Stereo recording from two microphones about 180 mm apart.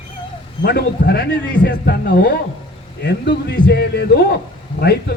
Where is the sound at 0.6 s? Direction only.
65° left (ahead or behind).